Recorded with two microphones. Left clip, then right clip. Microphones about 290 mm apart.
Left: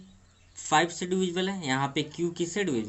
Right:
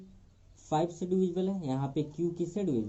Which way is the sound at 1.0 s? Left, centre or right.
Left.